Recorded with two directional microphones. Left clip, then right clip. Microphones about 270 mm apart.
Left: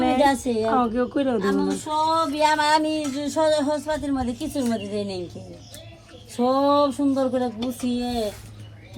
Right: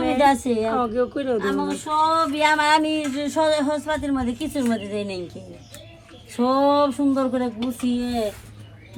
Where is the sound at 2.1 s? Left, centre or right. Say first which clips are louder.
Right 1 dB; right.